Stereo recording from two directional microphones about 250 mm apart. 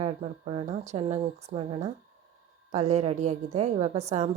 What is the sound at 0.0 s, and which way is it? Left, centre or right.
A woman's voice, right.